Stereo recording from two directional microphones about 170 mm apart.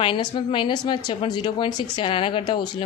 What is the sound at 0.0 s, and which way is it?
A woman's voice, 30° left (ahead or behind).